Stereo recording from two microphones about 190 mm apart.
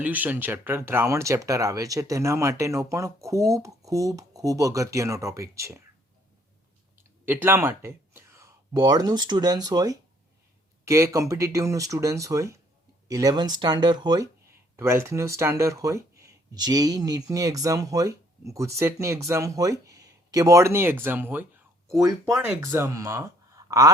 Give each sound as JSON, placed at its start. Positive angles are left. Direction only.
{"t": 0.0, "sound": "speech", "side_deg": -10}
{"t": 7.3, "sound": "speech", "side_deg": -10}